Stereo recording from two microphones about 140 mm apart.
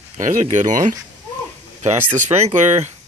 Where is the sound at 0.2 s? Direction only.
65° right (ahead or behind).